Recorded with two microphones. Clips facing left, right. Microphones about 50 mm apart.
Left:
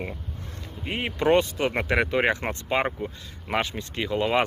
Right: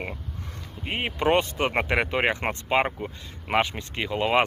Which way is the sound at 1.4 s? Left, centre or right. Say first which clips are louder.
Even; right.